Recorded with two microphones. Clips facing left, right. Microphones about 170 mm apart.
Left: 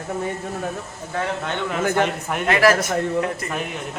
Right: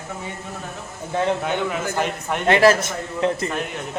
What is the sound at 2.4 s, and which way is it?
Speech, 25° right (ahead or behind).